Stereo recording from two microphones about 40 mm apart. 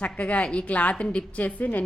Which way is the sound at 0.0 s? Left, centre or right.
Left.